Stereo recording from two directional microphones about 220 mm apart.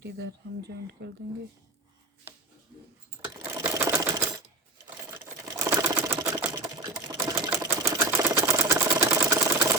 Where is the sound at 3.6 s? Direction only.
15° right (ahead or behind).